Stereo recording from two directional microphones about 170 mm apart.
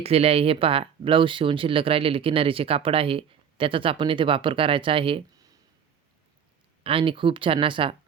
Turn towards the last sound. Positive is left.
turn(degrees=-30)  # may be behind; listen again after turning